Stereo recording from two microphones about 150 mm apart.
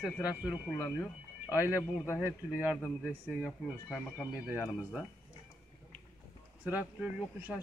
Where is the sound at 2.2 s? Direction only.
10° right (ahead or behind).